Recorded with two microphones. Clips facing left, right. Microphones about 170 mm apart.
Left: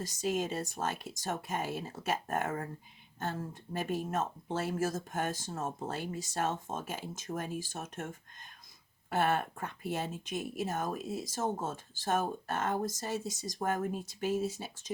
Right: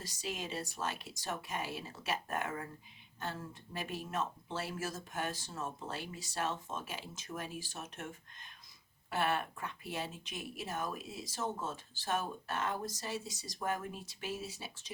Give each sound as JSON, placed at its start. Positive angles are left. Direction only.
{"t": 0.0, "sound": "speech", "side_deg": 45}